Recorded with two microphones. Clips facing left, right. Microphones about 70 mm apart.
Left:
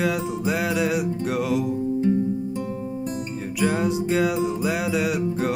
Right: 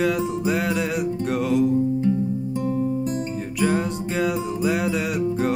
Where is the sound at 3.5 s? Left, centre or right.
Centre.